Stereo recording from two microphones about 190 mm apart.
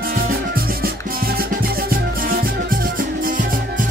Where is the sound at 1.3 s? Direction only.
50° right (ahead or behind).